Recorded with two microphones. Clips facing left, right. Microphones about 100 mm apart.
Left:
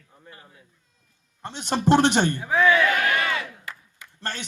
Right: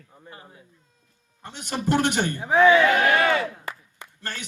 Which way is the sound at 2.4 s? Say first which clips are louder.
Right 6 dB; 20° right (ahead or behind).